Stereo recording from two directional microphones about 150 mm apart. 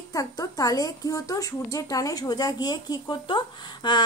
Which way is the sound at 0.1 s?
25° left (ahead or behind).